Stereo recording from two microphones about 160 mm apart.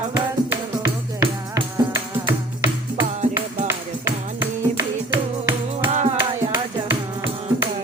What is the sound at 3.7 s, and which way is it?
Music, 15° right (ahead or behind).